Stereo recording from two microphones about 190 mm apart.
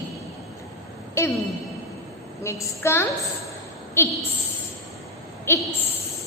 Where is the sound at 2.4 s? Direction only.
15° left (ahead or behind).